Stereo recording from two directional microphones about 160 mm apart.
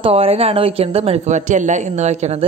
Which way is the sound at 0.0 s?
40° right (ahead or behind).